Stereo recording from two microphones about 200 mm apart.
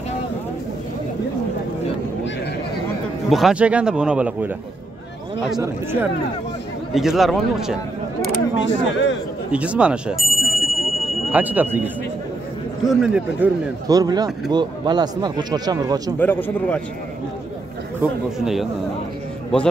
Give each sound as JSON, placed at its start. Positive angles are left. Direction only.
{"t": 3.3, "sound": "a man's voice", "side_deg": 0}
{"t": 5.6, "sound": "speech", "side_deg": -10}
{"t": 6.9, "sound": "speech", "side_deg": 0}
{"t": 8.5, "sound": "speech", "side_deg": 65}
{"t": 9.5, "sound": "a man's voice", "side_deg": -5}
{"t": 13.8, "sound": "speech", "side_deg": -20}
{"t": 16.2, "sound": "a man's voice", "side_deg": 10}
{"t": 18.0, "sound": "a man's voice", "side_deg": -10}